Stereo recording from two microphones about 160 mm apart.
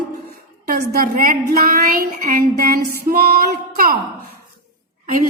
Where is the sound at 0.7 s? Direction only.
65° right (ahead or behind).